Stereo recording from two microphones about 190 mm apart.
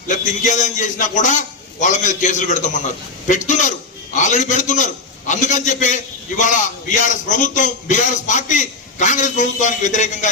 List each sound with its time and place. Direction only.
0.1 s a man's voice: 40° left (ahead or behind)